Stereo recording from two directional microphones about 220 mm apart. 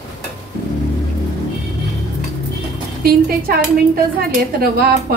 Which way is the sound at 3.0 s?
45° right (ahead or behind).